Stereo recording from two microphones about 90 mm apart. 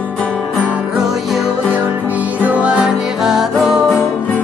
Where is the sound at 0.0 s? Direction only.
10° left (ahead or behind).